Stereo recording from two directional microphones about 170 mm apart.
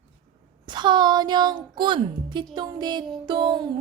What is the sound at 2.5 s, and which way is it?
Music, 25° right (ahead or behind).